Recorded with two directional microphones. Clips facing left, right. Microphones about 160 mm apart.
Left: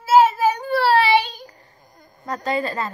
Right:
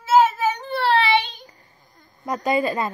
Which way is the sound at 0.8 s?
40° left (ahead or behind).